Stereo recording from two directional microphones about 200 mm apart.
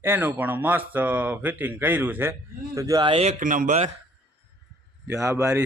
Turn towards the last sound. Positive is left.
turn(degrees=-15)  # may be behind; listen again after turning